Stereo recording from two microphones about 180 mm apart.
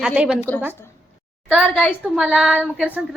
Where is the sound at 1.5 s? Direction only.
5° left (ahead or behind).